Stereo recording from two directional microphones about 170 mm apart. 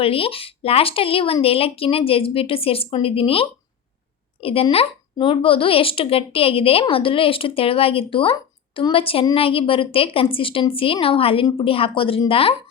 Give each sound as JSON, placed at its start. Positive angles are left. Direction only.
{"t": 0.0, "sound": "speech", "side_deg": 35}